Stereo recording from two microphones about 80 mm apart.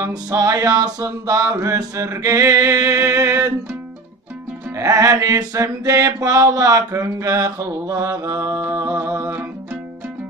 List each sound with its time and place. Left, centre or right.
0.1 s mantra: right
4.7 s mantra: right